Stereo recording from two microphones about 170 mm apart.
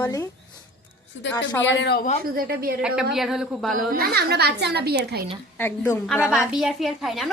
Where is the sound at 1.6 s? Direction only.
90° left.